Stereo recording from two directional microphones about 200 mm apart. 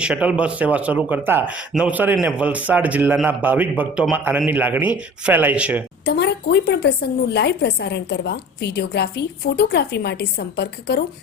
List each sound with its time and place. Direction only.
0.0 s speech: 5° right (ahead or behind)
6.1 s speech: 55° left (ahead or behind)